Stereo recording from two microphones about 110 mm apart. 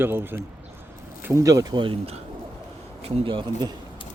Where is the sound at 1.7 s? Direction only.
50° right (ahead or behind).